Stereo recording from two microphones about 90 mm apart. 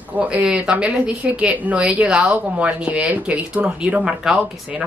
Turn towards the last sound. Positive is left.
turn(degrees=-10)  # may be behind; listen again after turning